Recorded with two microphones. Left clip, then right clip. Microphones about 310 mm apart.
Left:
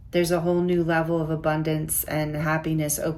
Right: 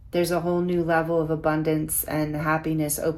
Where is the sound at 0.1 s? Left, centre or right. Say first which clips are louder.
Left 1 dB; centre.